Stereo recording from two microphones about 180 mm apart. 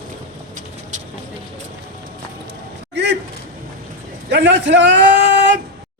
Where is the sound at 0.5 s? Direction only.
45° right (ahead or behind).